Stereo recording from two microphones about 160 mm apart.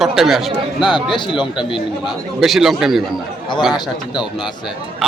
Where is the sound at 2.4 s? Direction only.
Centre (ahead or behind).